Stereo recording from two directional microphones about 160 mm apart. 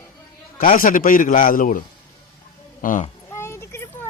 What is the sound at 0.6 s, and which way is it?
Mantra, 60° left (ahead or behind).